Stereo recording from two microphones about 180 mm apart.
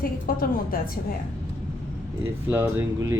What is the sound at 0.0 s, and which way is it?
Speech, 55° left (ahead or behind).